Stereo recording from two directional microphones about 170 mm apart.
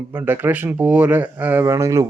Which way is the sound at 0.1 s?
10° right (ahead or behind).